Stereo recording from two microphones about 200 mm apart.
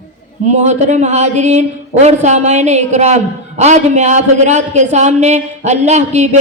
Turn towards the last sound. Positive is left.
turn(degrees=-35)  # may be behind; listen again after turning